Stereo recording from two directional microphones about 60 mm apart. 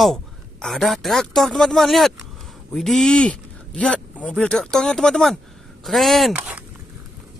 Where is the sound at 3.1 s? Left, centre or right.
Centre.